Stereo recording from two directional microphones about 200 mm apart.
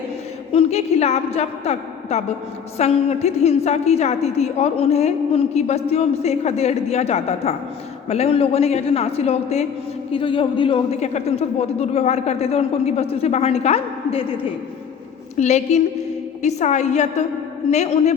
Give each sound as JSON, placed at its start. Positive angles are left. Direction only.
{"t": 0.5, "sound": "a woman's voice", "side_deg": 30}